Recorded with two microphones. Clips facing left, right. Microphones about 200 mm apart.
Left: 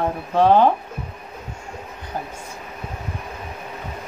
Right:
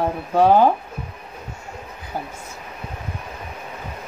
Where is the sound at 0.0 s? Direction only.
5° right (ahead or behind).